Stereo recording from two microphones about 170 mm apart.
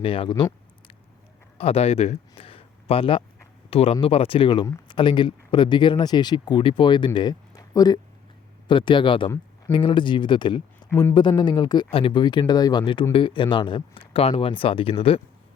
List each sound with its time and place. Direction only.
0.0 s speech: 30° left (ahead or behind)
1.5 s speech: 35° left (ahead or behind)